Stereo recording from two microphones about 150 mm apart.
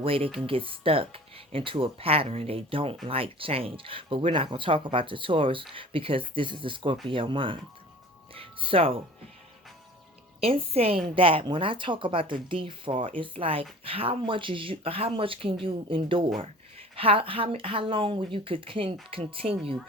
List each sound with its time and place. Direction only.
0.0 s speech: 40° right (ahead or behind)
8.3 s music: 35° right (ahead or behind)
10.4 s speech: 40° right (ahead or behind)